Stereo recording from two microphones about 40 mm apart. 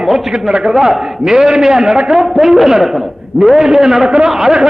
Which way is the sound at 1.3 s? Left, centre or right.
Right.